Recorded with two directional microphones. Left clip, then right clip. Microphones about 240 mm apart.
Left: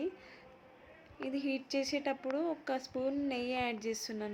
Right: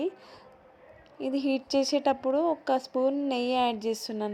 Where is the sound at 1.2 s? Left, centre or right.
Right.